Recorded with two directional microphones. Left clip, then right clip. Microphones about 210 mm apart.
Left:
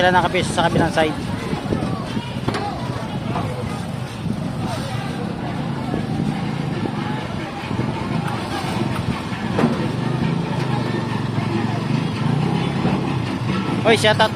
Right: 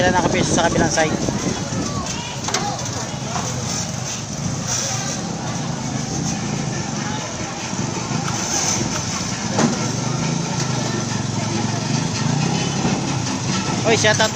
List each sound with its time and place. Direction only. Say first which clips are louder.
0.0 s speech: left 1 dB; 20° left (ahead or behind)
13.8 s speech: left 1 dB; 20° left (ahead or behind)